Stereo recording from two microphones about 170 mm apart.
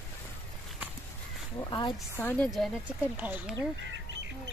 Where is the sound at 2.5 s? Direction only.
5° right (ahead or behind).